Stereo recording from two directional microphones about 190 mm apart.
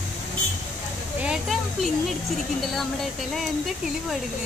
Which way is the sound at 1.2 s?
Centre (ahead or behind).